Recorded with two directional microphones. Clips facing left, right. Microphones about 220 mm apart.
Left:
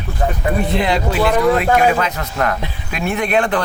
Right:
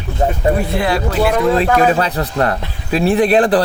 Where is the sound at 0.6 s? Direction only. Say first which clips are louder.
Even; 20° left (ahead or behind).